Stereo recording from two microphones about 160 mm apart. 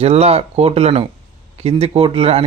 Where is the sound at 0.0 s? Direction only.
40° right (ahead or behind).